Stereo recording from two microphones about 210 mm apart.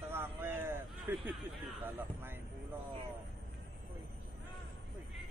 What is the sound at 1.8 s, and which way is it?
Speech, 10° right (ahead or behind).